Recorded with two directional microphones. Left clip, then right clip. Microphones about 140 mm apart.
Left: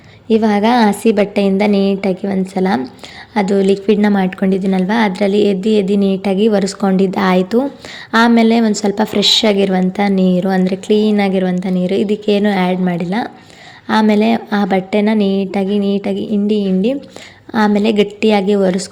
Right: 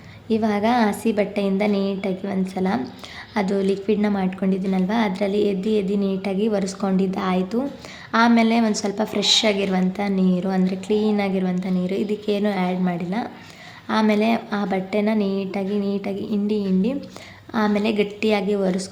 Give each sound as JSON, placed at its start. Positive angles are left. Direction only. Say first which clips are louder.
{"t": 0.3, "sound": "a woman's voice", "louder": "left 8 dB", "side_deg": 30}